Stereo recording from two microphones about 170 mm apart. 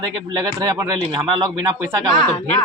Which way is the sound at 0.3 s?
25° right (ahead or behind).